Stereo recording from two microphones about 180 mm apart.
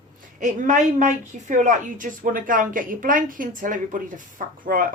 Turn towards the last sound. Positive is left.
turn(degrees=-50)  # may be behind; listen again after turning